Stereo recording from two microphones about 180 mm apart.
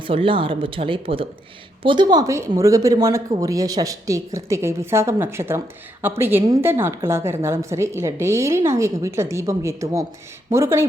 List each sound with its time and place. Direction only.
0.0 s speech: 30° right (ahead or behind)